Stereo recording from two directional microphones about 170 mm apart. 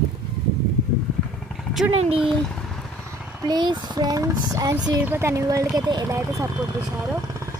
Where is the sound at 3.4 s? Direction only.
25° right (ahead or behind).